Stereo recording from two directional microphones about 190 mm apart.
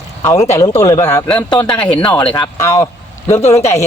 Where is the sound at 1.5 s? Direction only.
25° left (ahead or behind).